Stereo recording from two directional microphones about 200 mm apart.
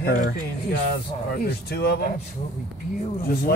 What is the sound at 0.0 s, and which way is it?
Speech, 50° left (ahead or behind).